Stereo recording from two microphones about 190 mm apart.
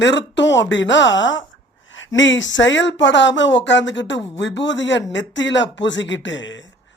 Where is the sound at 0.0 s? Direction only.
70° left (ahead or behind); by 2.0 s 85° left.